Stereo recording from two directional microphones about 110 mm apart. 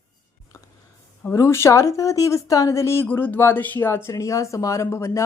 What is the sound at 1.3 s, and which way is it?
Speech, 25° left (ahead or behind).